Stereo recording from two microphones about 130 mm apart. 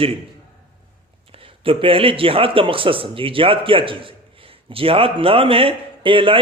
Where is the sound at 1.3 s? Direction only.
45° right (ahead or behind).